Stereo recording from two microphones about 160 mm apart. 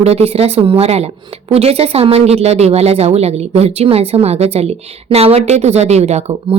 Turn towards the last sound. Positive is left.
turn(degrees=-45)  # may be behind; listen again after turning